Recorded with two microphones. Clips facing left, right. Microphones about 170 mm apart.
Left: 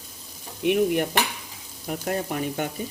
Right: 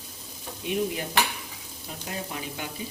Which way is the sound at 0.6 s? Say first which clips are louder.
Left 8 dB; 65° left (ahead or behind).